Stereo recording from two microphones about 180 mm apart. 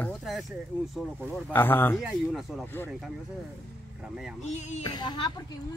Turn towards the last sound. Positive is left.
turn(degrees=25)  # may be behind; listen again after turning